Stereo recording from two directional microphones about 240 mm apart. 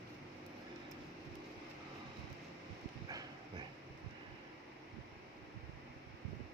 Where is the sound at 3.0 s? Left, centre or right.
Centre.